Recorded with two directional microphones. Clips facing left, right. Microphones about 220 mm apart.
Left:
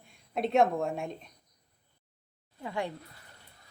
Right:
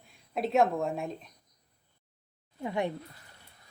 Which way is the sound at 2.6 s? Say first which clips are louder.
Right 3 dB; 20° right (ahead or behind).